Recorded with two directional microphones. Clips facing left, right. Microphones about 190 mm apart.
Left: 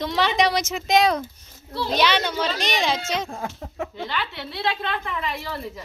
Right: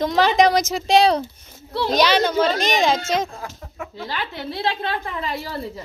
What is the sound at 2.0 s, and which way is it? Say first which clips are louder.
A child's voice: right 5 dB; 40° right (ahead or behind).